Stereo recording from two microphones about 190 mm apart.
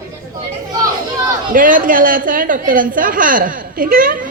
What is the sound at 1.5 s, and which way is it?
A woman's voice, 45° right (ahead or behind).